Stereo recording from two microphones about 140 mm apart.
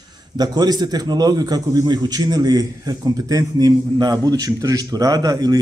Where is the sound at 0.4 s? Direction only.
30° right (ahead or behind).